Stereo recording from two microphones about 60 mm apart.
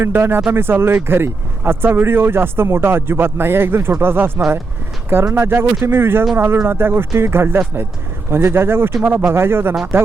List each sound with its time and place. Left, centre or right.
0.0 s speech: right